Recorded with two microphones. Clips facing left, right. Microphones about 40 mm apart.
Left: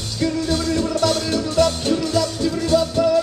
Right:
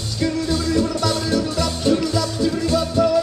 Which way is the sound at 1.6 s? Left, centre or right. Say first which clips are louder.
Left 2 dB; left.